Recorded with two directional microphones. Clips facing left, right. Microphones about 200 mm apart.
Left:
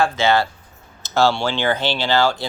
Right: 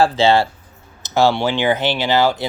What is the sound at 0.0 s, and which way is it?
Speech, 30° right (ahead or behind).